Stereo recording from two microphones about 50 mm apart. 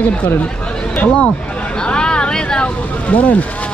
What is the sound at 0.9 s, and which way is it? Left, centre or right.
Speech, left.